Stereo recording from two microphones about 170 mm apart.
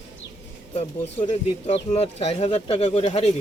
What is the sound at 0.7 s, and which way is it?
Speech, 35° left (ahead or behind).